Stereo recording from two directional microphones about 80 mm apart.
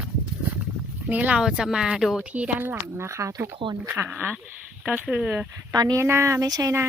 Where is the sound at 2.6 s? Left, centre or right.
Right.